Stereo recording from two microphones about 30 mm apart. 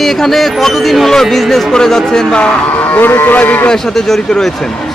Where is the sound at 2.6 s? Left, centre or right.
Left.